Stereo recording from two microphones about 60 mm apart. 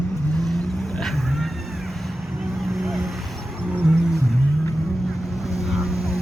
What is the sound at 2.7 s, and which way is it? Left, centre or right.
Vehicle, centre.